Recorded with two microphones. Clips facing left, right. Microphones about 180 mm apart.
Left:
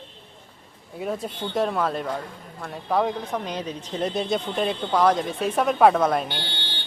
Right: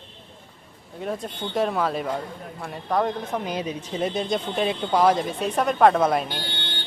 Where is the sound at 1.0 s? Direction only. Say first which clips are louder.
Left 1 dB; 5° left (ahead or behind).